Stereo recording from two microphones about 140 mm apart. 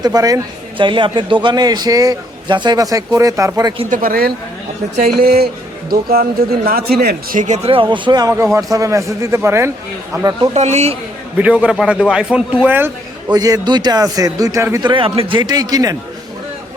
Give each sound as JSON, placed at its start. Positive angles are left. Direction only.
{"t": 0.0, "sound": "a man's voice", "side_deg": -25}
{"t": 0.8, "sound": "a man's voice", "side_deg": -35}
{"t": 3.8, "sound": "speech", "side_deg": -80}
{"t": 7.3, "sound": "speech", "side_deg": -65}
{"t": 7.7, "sound": "speech", "side_deg": -35}
{"t": 8.5, "sound": "a man's voice", "side_deg": -25}
{"t": 10.5, "sound": "a man's voice", "side_deg": -55}
{"t": 11.3, "sound": "a man's voice", "side_deg": -10}
{"t": 13.3, "sound": "a man's voice", "side_deg": -25}
{"t": 14.8, "sound": "speech", "side_deg": -40}